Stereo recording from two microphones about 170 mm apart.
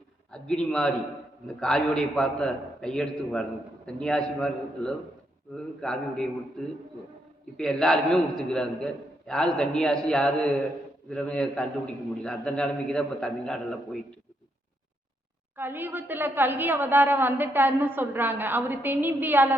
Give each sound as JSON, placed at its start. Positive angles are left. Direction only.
{"t": 0.3, "sound": "a man's voice", "side_deg": 5}
{"t": 7.5, "sound": "a man's voice", "side_deg": 5}
{"t": 15.5, "sound": "a woman's voice", "side_deg": -10}